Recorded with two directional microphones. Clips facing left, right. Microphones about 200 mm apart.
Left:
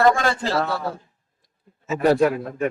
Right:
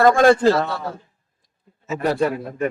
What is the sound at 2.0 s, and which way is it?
Speech, centre (ahead or behind).